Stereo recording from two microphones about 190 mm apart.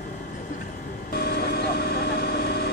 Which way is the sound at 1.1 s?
55° left (ahead or behind).